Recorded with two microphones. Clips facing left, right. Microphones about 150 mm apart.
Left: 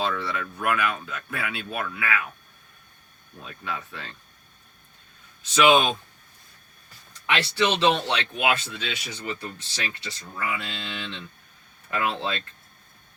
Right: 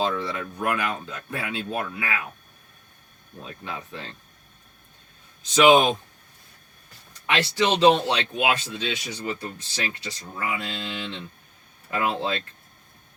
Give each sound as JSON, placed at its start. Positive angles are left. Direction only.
{"t": 0.0, "sound": "speech", "side_deg": -20}
{"t": 3.4, "sound": "speech", "side_deg": -25}
{"t": 5.6, "sound": "speech", "side_deg": -25}
{"t": 7.3, "sound": "speech", "side_deg": -30}
{"t": 10.3, "sound": "speech", "side_deg": -25}
{"t": 10.6, "sound": "speech", "side_deg": -35}